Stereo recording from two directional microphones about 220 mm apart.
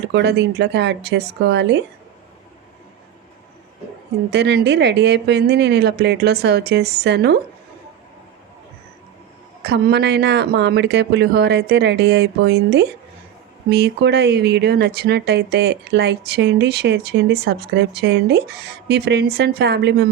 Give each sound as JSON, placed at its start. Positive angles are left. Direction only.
{"t": 0.1, "sound": "speech", "side_deg": -50}
{"t": 4.3, "sound": "speech", "side_deg": -50}
{"t": 9.6, "sound": "speech", "side_deg": -50}